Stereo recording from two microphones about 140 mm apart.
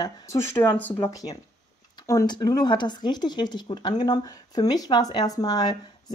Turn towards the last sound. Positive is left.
turn(degrees=25)  # may be behind; listen again after turning